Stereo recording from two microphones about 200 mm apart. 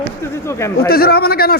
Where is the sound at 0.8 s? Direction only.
50° left (ahead or behind).